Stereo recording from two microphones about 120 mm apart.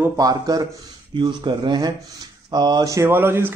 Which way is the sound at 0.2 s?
30° right (ahead or behind).